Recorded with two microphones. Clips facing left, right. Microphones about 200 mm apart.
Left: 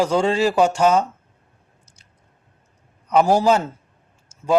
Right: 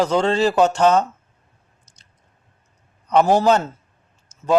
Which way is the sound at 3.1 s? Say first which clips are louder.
Right 1 dB; 10° left (ahead or behind).